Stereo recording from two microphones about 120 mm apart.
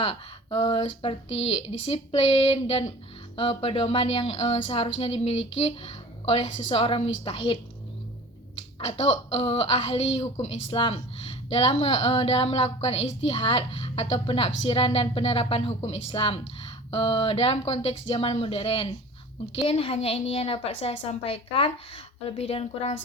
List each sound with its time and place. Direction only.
0.0 s a woman's voice: 55° left (ahead or behind)
8.9 s a woman's voice: 60° left (ahead or behind)